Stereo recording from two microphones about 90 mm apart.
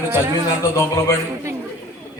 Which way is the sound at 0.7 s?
30° left (ahead or behind).